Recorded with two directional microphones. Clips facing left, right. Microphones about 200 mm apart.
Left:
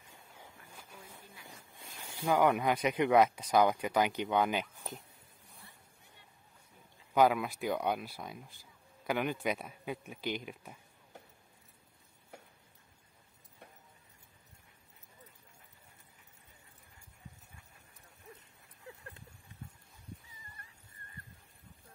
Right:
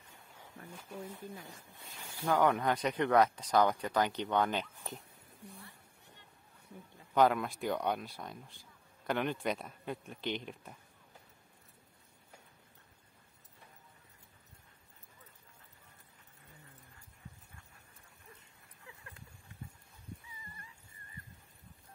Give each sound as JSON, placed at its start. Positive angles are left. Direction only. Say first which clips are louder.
{"t": 1.7, "sound": "speech", "louder": "left 1 dB", "side_deg": 15}
{"t": 5.4, "sound": "a sound", "louder": "right 15 dB", "side_deg": -70}
{"t": 7.2, "sound": "speech", "louder": "left 1 dB", "side_deg": 5}
{"t": 20.2, "sound": "dog", "louder": "right 3 dB", "side_deg": 55}